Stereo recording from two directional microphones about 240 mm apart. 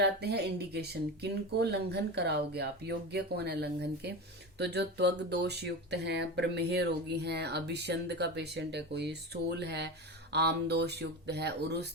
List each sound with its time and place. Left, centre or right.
0.0 s speech: right